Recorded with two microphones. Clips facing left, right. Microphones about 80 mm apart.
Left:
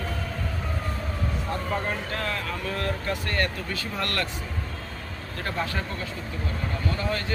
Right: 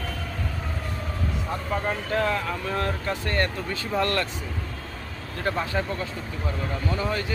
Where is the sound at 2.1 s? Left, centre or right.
Centre.